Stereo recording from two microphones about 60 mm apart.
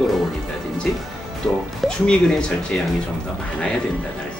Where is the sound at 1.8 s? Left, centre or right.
Centre.